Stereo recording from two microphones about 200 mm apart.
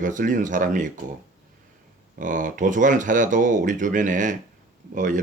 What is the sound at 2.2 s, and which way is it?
A man's voice, 40° right (ahead or behind).